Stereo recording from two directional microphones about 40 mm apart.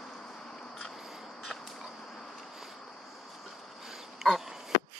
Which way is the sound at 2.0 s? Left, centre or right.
Centre.